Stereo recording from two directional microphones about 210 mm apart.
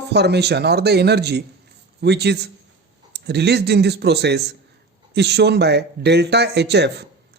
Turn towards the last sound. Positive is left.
turn(degrees=-55)  # may be behind; listen again after turning